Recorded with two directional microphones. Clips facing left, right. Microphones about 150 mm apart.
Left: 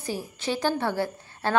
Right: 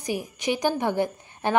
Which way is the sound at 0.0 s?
15° right (ahead or behind).